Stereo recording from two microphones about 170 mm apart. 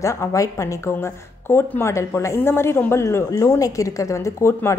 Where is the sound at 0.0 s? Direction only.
15° left (ahead or behind).